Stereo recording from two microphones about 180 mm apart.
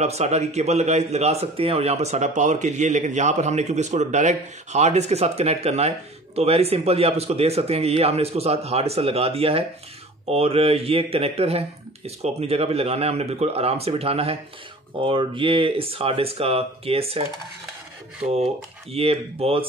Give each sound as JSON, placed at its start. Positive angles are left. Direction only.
{"t": 0.0, "sound": "a man's voice", "side_deg": -35}